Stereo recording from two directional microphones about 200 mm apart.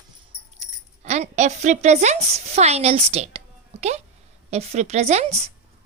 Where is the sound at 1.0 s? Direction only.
35° right (ahead or behind).